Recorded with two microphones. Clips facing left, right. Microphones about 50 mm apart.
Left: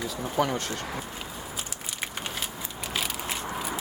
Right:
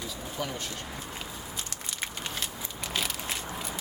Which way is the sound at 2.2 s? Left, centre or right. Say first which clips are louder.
Left 2 dB; centre.